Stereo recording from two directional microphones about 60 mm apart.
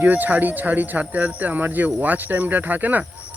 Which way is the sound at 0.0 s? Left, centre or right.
Right.